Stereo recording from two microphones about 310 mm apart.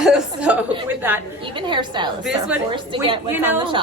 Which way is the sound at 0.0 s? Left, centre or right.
Centre.